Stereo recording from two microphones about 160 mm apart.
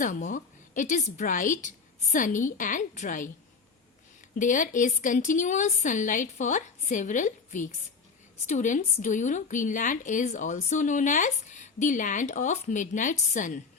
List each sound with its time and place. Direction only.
0.0 s a woman's voice: 50° left (ahead or behind)
4.4 s a woman's voice: 55° left (ahead or behind)